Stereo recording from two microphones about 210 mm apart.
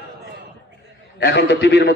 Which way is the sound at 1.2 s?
50° left (ahead or behind).